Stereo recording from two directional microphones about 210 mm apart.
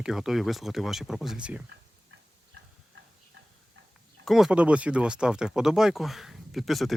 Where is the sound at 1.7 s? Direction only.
60° right (ahead or behind).